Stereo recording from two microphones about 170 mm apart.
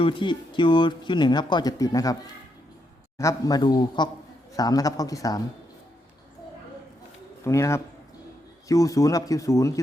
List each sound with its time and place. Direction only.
0.0 s speech: 30° left (ahead or behind)
3.2 s speech: 20° left (ahead or behind)
7.4 s a man's voice: 15° left (ahead or behind)